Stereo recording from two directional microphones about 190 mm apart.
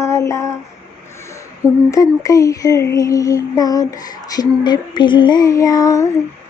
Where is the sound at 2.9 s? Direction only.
15° left (ahead or behind).